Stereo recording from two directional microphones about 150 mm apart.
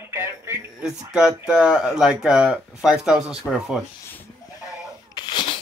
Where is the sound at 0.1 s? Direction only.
15° right (ahead or behind).